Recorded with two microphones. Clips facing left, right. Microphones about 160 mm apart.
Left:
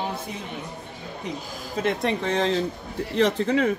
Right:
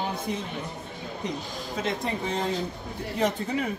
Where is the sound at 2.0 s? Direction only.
85° left.